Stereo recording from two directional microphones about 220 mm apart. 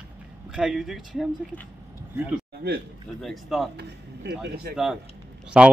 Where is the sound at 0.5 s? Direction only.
Centre (ahead or behind).